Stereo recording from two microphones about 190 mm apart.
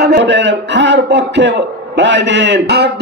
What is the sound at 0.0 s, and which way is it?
A man's voice, 65° right (ahead or behind).